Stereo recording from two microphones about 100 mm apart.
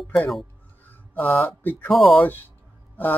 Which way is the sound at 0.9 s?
20° left (ahead or behind).